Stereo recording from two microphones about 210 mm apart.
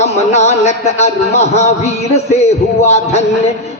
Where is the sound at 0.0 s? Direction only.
30° left (ahead or behind).